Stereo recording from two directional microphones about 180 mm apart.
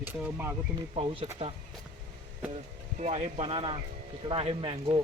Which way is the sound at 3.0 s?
40° right (ahead or behind).